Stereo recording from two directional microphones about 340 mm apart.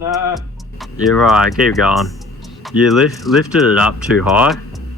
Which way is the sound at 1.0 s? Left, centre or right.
Centre.